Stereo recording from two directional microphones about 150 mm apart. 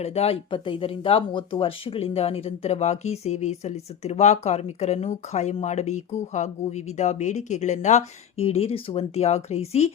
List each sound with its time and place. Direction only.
0.0 s speech: 45° left (ahead or behind)